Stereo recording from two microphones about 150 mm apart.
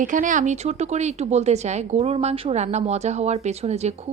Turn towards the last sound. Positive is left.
turn(degrees=-50)  # may be behind; listen again after turning